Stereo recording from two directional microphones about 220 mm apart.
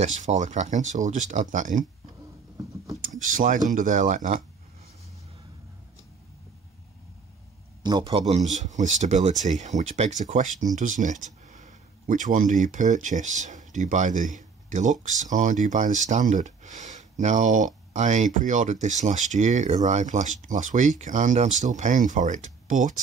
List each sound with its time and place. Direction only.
0.0 s speech: 30° right (ahead or behind)
2.5 s a sound: 15° right (ahead or behind)
3.2 s speech: 35° right (ahead or behind)
7.8 s a man's voice: 20° right (ahead or behind)